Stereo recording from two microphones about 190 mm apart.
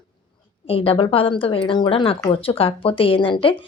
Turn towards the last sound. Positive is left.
turn(degrees=25)  # may be behind; listen again after turning